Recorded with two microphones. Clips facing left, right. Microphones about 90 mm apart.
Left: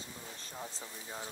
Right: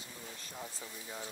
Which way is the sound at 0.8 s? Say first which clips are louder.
Even; 25° left (ahead or behind).